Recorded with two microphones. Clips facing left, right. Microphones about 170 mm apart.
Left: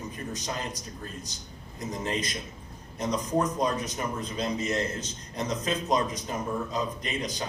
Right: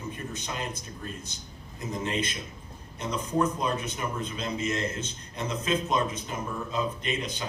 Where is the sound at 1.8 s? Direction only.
35° left (ahead or behind).